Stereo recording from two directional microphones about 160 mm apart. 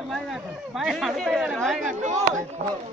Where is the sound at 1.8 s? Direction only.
50° right (ahead or behind).